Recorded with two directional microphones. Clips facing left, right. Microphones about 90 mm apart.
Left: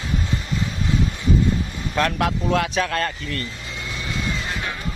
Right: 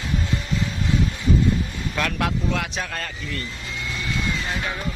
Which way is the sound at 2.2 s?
60° left (ahead or behind).